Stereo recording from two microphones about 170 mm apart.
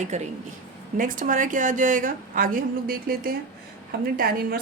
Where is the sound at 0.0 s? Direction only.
45° right (ahead or behind).